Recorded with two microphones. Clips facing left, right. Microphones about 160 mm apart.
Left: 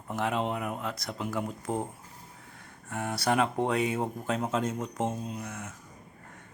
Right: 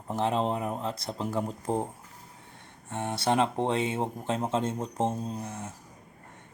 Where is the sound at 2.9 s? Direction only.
25° right (ahead or behind).